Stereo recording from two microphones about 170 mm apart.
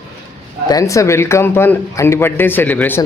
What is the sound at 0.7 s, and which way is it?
A man's voice, 20° left (ahead or behind).